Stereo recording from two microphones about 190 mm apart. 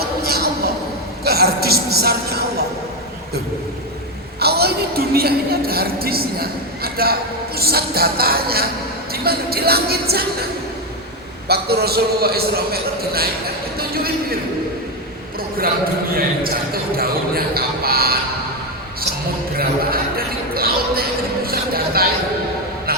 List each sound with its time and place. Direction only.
0.3 s a sound: 55° right (ahead or behind)
4.4 s a woman's voice: 55° right (ahead or behind)
11.4 s a man's voice: 55° right (ahead or behind)
16.1 s a woman's voice: 50° right (ahead or behind)
19.5 s basketball bounce: 50° right (ahead or behind)